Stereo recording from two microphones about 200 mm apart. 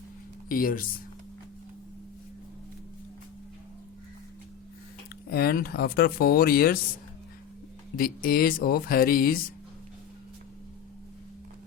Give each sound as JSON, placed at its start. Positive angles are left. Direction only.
{"t": 0.4, "sound": "speech", "side_deg": 45}
{"t": 5.3, "sound": "speech", "side_deg": 50}
{"t": 7.9, "sound": "speech", "side_deg": 45}